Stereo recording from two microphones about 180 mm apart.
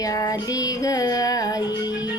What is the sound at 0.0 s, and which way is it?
Female singing, 20° left (ahead or behind).